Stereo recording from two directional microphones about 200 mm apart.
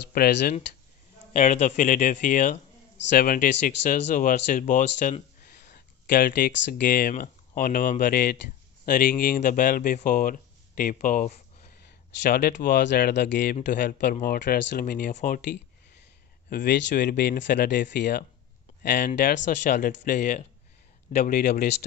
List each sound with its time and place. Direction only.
0.1 s a man's voice: 50° left (ahead or behind)
1.3 s a man's voice: 40° left (ahead or behind)
21.3 s a man's voice: 50° left (ahead or behind)